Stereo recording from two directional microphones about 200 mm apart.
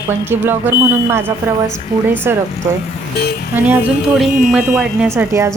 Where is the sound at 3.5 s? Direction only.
10° right (ahead or behind).